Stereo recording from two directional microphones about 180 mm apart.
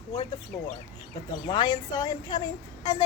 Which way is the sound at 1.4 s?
25° left (ahead or behind).